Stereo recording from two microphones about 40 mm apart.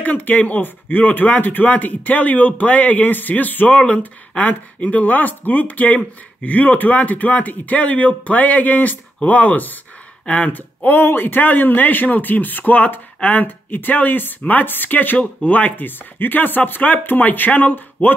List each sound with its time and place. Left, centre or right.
0.0 s speech: left
10.2 s speech: left
10.5 s speech: left